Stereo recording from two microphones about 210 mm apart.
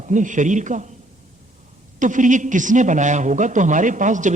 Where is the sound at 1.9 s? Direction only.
35° right (ahead or behind).